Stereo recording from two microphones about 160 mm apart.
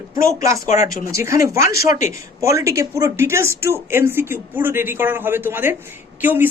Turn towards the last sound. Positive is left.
turn(degrees=-10)  # may be behind; listen again after turning